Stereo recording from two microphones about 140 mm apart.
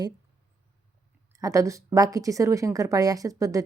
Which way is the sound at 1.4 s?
25° right (ahead or behind).